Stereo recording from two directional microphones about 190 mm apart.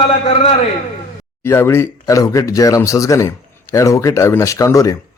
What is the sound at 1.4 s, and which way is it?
Speech, 15° left (ahead or behind).